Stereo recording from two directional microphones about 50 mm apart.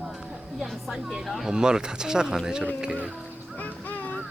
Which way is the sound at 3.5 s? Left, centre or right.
Left.